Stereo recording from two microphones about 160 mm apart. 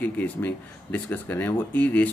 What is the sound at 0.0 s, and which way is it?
Speech, 10° left (ahead or behind).